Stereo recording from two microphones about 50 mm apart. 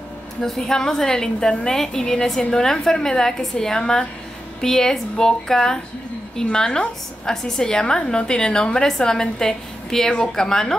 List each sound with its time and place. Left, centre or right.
0.4 s a woman's voice: centre